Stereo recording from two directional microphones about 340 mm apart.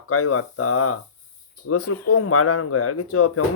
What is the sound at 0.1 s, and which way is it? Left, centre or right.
Speech, left.